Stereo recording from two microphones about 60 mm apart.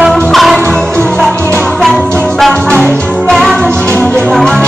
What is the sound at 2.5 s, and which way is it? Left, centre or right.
Music, centre.